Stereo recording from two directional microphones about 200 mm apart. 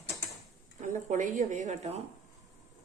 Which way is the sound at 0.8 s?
35° right (ahead or behind).